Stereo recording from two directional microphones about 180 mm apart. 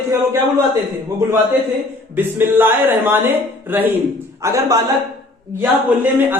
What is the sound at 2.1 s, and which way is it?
A man's voice, 10° right (ahead or behind).